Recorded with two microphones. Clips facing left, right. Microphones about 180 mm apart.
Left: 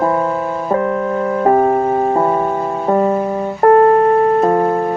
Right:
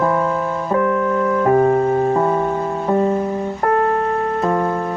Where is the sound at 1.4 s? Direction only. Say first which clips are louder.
Left 2 dB; 40° left (ahead or behind).